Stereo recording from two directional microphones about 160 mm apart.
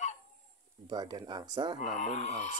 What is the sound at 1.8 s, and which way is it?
Speech, 50° left (ahead or behind).